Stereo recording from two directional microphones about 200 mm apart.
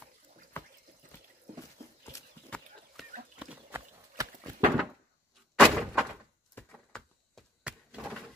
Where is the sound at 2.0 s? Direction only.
10° left (ahead or behind).